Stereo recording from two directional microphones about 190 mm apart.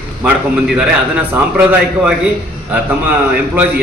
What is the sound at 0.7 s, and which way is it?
A man's voice, 10° right (ahead or behind).